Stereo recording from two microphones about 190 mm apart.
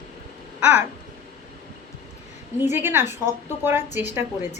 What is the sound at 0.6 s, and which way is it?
Speech, 10° right (ahead or behind).